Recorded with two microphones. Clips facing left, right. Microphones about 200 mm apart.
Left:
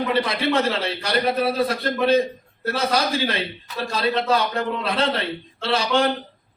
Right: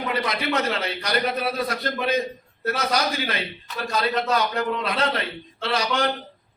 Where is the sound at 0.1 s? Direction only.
30° left (ahead or behind).